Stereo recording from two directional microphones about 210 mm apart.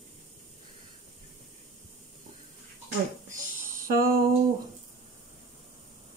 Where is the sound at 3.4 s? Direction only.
40° right (ahead or behind).